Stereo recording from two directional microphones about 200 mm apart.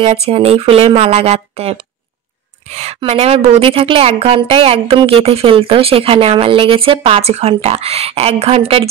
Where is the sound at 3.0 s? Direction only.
30° right (ahead or behind).